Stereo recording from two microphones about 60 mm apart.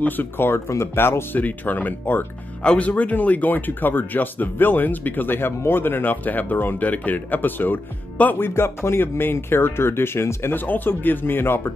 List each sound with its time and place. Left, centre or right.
0.0 s speech: left
1.4 s speech: left
2.6 s speech: centre; by 11.7 s left